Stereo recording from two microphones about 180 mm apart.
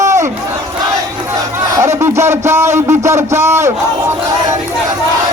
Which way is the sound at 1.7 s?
15° right (ahead or behind).